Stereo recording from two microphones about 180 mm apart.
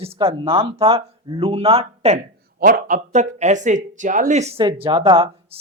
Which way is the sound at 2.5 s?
50° right (ahead or behind).